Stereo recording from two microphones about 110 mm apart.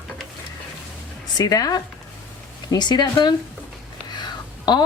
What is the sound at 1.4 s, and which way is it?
A woman's voice, 35° left (ahead or behind).